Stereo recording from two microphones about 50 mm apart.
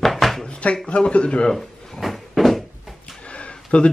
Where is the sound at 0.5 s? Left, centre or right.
Left.